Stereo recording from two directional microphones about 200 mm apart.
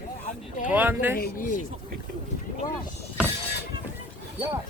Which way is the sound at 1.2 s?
45° left (ahead or behind).